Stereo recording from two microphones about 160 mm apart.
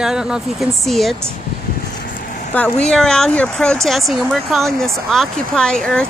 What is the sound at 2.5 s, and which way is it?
Speech, 5° left (ahead or behind).